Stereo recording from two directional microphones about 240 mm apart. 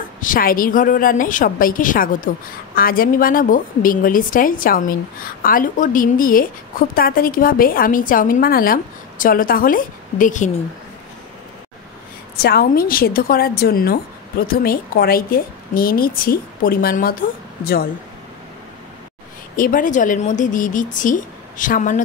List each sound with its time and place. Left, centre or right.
0.2 s a woman's voice: left
12.4 s a woman's voice: left
19.5 s a woman's voice: left